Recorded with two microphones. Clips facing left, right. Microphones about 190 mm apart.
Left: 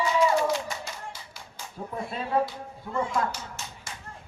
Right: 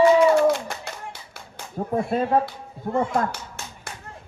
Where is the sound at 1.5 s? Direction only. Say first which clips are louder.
Right 10 dB; 50° right (ahead or behind).